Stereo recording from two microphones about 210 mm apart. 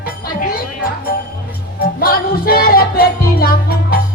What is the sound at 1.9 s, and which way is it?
Music, 45° left (ahead or behind).